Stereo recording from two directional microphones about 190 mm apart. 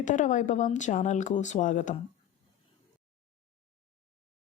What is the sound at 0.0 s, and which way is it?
Speech, 40° left (ahead or behind).